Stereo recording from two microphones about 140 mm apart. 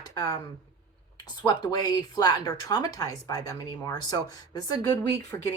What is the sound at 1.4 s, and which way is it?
Speech, 30° left (ahead or behind).